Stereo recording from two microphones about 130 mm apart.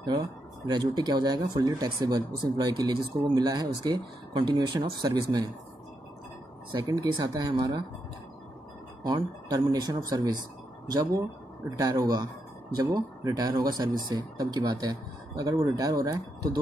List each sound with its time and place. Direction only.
0.0 s speech: 35° right (ahead or behind)
6.7 s speech: 30° right (ahead or behind)
9.0 s speech: 30° right (ahead or behind)
11.8 s speech: 25° right (ahead or behind)